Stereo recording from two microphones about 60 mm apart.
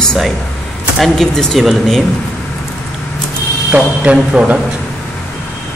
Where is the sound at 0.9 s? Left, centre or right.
Centre.